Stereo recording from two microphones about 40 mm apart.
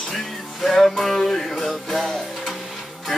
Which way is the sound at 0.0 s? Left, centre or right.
Centre.